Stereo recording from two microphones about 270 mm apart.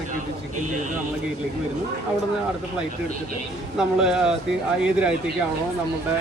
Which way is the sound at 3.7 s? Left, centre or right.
Centre.